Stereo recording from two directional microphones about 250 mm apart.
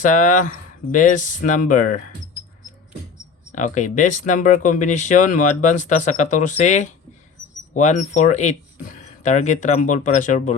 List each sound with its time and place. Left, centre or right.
0.0 s speech: left
3.5 s speech: left